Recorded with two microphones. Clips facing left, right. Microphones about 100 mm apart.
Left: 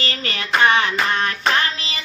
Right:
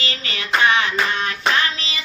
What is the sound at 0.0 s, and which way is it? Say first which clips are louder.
Hands: left 2 dB; 40° left (ahead or behind).